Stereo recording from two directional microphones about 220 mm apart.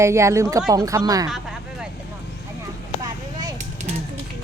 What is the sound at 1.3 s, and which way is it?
Vehicle, centre (ahead or behind).